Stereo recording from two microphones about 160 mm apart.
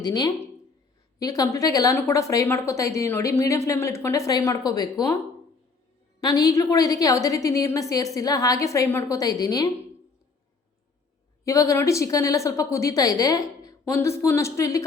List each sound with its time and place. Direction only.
0.0 s a woman's voice: 25° left (ahead or behind)
6.1 s a woman's voice: 25° left (ahead or behind)
11.4 s a woman's voice: 20° left (ahead or behind)